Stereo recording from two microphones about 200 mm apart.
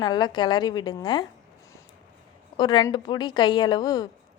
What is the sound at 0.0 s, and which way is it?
A woman's voice, 20° left (ahead or behind).